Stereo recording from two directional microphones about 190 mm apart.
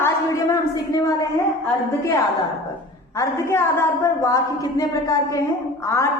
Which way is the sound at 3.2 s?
15° left (ahead or behind).